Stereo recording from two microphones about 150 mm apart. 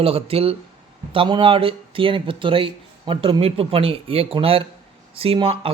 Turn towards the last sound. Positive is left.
turn(degrees=-35)  # may be behind; listen again after turning